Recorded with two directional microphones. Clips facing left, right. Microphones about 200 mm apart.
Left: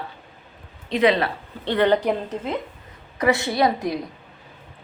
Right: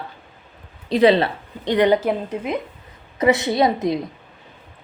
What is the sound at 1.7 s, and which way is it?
Speech, 15° right (ahead or behind).